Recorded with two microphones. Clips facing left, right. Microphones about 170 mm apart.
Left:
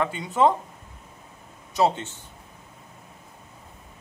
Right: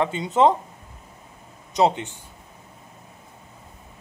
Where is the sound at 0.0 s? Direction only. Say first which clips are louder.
Right 3 dB; 20° right (ahead or behind).